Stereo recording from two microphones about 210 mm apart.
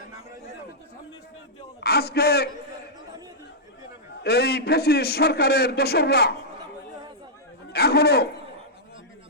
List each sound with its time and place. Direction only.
1.8 s a man's voice: 50° left (ahead or behind)
4.2 s a man's voice: 50° left (ahead or behind)
7.7 s a man's voice: 50° left (ahead or behind)